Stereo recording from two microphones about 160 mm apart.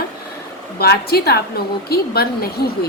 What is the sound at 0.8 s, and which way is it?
A woman's voice, 75° left (ahead or behind).